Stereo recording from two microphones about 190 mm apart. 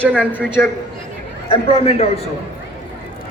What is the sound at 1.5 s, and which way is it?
Speech, 30° left (ahead or behind).